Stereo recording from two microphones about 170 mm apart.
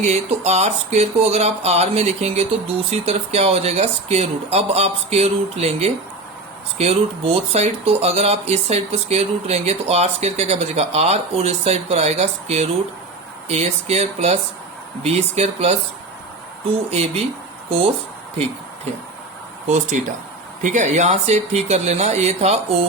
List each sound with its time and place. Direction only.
0.0 s speech: 40° right (ahead or behind)
16.9 s speech: 40° right (ahead or behind)
19.6 s speech: 45° right (ahead or behind)